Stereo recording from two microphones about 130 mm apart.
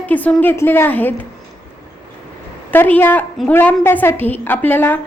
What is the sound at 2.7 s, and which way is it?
A woman's voice, 15° left (ahead or behind).